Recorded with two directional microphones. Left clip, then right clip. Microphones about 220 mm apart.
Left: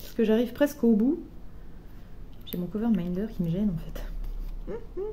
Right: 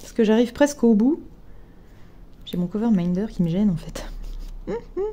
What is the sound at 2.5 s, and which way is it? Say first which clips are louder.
Speech: right 6 dB; 40° right (ahead or behind).